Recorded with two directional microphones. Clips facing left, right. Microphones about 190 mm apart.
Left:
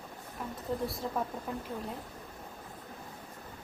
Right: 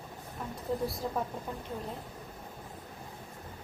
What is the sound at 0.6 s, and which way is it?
Speech, centre (ahead or behind).